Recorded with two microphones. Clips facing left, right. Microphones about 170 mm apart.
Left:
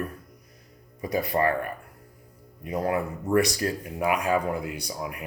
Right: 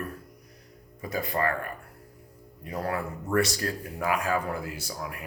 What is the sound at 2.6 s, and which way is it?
Speech, 15° left (ahead or behind).